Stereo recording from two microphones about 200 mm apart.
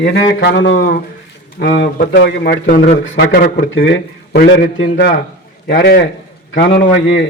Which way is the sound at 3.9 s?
65° left (ahead or behind).